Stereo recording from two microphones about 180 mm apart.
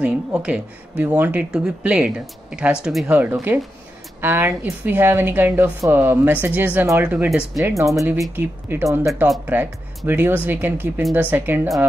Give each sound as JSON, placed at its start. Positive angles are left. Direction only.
{"t": 0.0, "sound": "speech", "side_deg": -5}
{"t": 7.6, "sound": "speech", "side_deg": -15}